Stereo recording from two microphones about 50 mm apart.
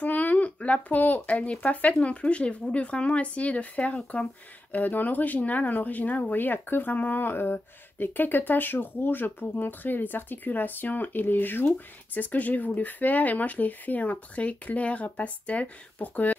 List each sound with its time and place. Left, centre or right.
0.0 s speech: left